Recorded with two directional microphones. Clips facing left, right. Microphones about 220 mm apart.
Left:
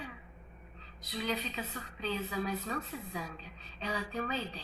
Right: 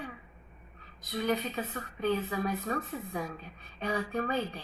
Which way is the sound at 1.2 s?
55° right (ahead or behind).